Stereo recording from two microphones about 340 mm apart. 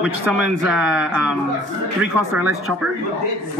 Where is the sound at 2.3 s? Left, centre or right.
Centre.